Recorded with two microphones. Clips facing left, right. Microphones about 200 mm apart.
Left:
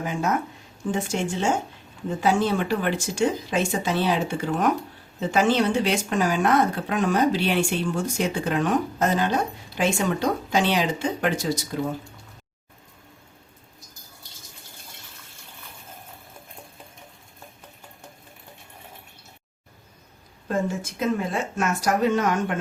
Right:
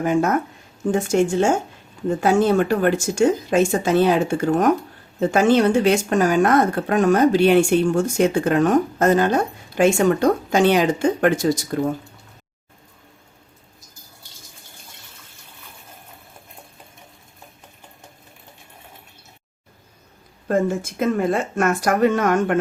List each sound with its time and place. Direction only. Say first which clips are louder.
0.0 s speech: right 7 dB; 55° right (ahead or behind)
20.5 s speech: right 6 dB; 55° right (ahead or behind)